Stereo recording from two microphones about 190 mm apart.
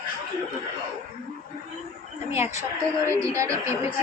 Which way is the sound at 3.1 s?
15° right (ahead or behind).